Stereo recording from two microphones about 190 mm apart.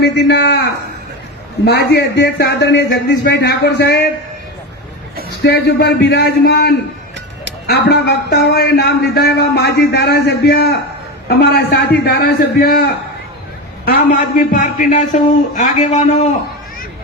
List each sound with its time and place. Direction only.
0.0 s speech: 65° left (ahead or behind)
5.4 s a man's voice: 60° left (ahead or behind); by 16.0 s 40° left (ahead or behind)